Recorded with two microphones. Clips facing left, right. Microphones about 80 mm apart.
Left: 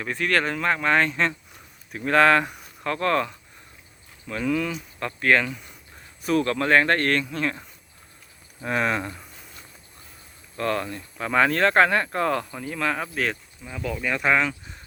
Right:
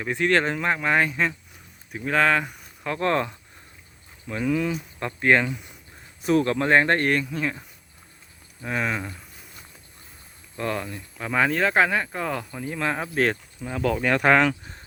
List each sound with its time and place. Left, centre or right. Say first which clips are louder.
0.0 s speech: right 2 dB; right; by 2.6 s centre
2.8 s speech: even; centre
8.6 s speech: left 3 dB; centre
10.6 s speech: left 2 dB; centre
12.6 s speech: right 2 dB; right
13.6 s speech: right 6 dB; right